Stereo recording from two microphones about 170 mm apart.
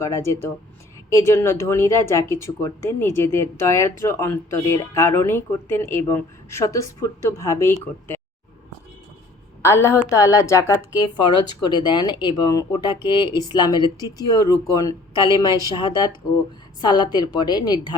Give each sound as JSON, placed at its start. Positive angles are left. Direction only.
{"t": 1.1, "sound": "speech", "side_deg": 15}
{"t": 9.6, "sound": "a woman's voice", "side_deg": 15}